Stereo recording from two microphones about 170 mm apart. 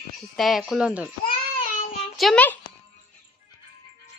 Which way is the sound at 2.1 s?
Centre (ahead or behind).